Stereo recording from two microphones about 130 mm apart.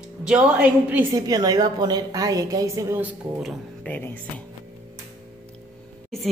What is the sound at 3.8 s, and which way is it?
Speech, 10° left (ahead or behind).